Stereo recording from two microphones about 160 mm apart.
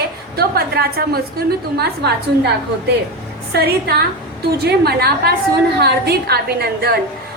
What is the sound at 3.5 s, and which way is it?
A woman's voice, 80° right.